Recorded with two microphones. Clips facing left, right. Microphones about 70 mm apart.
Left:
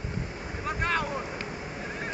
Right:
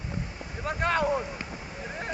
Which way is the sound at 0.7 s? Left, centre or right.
Centre.